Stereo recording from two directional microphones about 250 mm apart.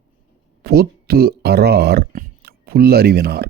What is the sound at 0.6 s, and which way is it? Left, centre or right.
Speech, right.